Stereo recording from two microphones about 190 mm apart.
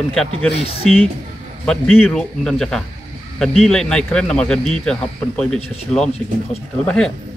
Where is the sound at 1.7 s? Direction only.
Centre (ahead or behind).